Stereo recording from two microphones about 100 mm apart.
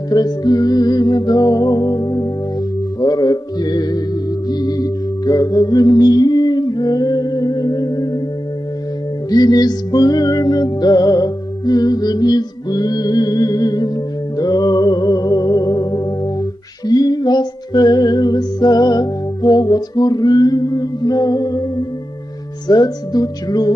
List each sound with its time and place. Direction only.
0.1 s music: 40° left (ahead or behind)
9.3 s music: 40° left (ahead or behind)